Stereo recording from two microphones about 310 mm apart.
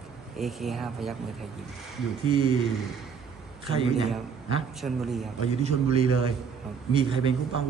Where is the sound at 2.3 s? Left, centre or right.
Centre.